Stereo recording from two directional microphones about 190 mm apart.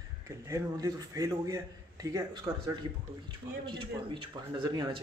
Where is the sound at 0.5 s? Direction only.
15° right (ahead or behind).